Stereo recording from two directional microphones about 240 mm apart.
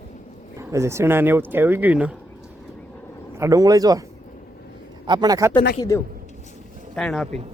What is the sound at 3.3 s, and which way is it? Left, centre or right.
Speech, centre.